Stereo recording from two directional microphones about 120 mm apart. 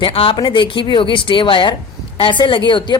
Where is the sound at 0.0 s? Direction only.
45° left (ahead or behind).